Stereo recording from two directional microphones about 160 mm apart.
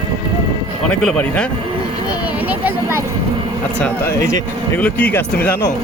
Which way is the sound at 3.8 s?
15° left (ahead or behind).